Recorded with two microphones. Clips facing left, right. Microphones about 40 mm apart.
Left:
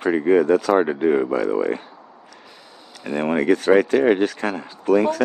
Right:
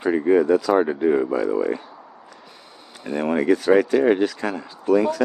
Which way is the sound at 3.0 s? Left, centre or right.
Left.